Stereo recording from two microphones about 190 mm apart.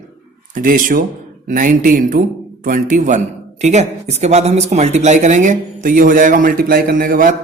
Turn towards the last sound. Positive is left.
turn(degrees=-45)  # may be behind; listen again after turning